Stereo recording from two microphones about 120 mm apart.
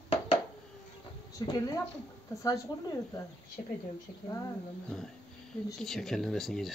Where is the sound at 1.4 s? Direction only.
30° left (ahead or behind).